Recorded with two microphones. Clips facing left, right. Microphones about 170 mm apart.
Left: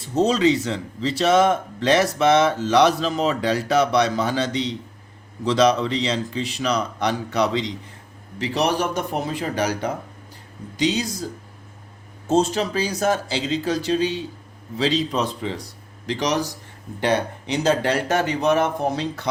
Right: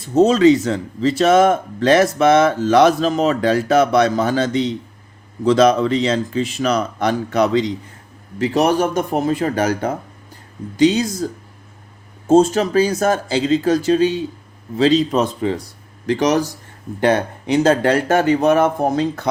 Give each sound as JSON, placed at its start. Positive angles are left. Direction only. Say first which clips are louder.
{"t": 0.1, "sound": "speech", "louder": "right 7 dB", "side_deg": -50}
{"t": 12.3, "sound": "speech", "louder": "right 7 dB", "side_deg": -50}